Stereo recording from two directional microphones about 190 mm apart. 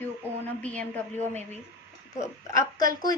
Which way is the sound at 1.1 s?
35° right (ahead or behind).